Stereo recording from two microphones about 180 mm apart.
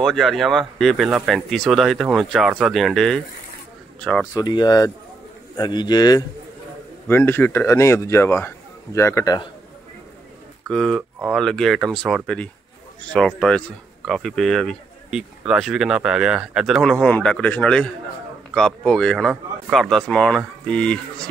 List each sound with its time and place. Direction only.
0.0 s speech: centre (ahead or behind)
4.3 s speech: 20° left (ahead or behind)
7.1 s a man's voice: 10° left (ahead or behind)
10.7 s speech: centre (ahead or behind)